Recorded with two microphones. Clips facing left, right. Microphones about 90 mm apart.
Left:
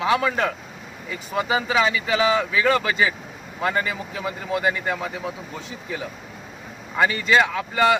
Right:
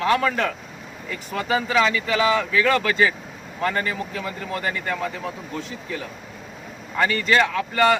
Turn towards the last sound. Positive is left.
turn(degrees=15)  # may be behind; listen again after turning